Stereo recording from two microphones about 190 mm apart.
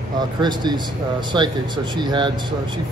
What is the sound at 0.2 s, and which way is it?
Speech, 20° right (ahead or behind).